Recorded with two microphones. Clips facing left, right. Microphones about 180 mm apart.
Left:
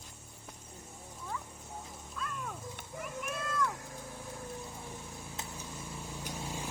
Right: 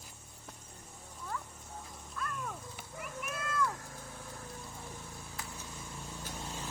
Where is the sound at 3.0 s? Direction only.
5° right (ahead or behind).